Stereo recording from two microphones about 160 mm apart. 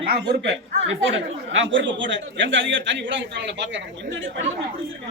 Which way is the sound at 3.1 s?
90° right.